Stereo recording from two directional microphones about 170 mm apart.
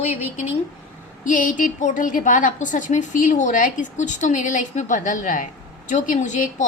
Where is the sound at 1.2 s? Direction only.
50° left (ahead or behind).